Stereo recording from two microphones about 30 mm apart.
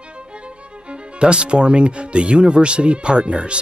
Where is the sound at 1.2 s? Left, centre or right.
Right.